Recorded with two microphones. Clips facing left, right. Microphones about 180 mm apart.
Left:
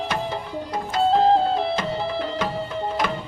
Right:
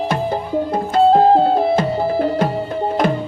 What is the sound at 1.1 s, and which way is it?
Music, 40° right (ahead or behind).